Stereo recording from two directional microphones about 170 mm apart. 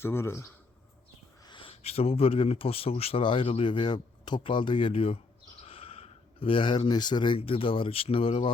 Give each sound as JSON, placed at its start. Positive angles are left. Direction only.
{"t": 0.0, "sound": "a man's voice", "side_deg": 15}
{"t": 1.5, "sound": "speech", "side_deg": 30}